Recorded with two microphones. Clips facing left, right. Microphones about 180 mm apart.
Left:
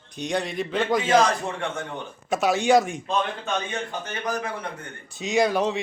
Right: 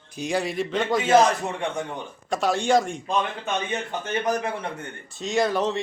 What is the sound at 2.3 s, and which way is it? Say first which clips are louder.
Speech: left 2 dB; 5° left (ahead or behind).